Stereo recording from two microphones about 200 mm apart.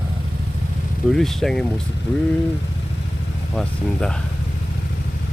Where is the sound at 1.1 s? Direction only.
Centre (ahead or behind).